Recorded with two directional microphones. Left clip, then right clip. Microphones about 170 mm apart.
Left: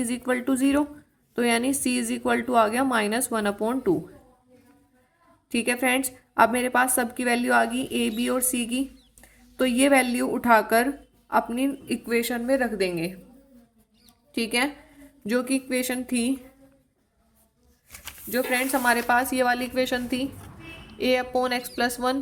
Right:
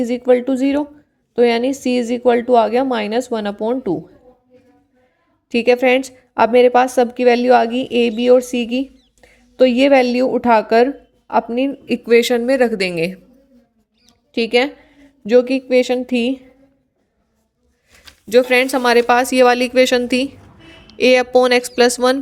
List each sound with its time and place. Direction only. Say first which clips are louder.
0.0 s a woman's voice: right 12 dB; 30° right (ahead or behind)
5.5 s a woman's voice: right 11 dB; 40° right (ahead or behind); by 13.1 s 60° right (ahead or behind)
14.3 s a woman's voice: right 10 dB; 40° right (ahead or behind)
18.3 s speech: right 12 dB; 65° right (ahead or behind)